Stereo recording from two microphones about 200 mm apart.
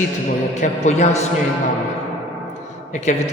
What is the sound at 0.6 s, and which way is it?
Speech, 35° left (ahead or behind).